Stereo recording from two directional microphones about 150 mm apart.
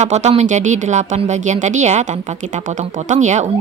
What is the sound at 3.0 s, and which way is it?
Speech, 55° right (ahead or behind).